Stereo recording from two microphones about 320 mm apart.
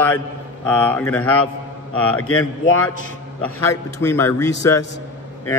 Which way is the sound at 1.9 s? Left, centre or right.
Left.